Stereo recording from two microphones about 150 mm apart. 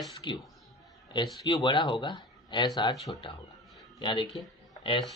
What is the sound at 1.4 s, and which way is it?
Speech, 30° left (ahead or behind).